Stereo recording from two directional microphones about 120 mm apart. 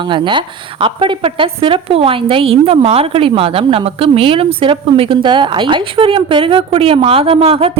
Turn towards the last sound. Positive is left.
turn(degrees=-50)  # may be behind; listen again after turning